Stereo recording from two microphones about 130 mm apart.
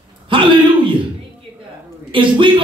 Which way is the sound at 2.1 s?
40° right (ahead or behind).